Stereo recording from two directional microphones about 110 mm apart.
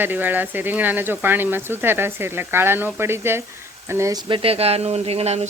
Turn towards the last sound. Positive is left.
turn(degrees=-75)  # may be behind; listen again after turning